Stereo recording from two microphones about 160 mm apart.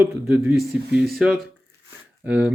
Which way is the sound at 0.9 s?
90° right.